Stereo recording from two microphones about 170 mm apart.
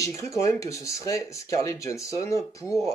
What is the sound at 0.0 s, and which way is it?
Speech, 20° left (ahead or behind).